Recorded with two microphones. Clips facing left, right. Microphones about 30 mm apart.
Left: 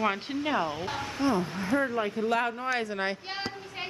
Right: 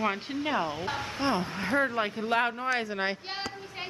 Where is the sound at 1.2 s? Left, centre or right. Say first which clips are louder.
Left 2 dB; right.